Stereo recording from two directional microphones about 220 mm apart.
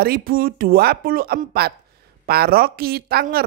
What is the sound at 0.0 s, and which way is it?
A woman's voice, 45° right (ahead or behind).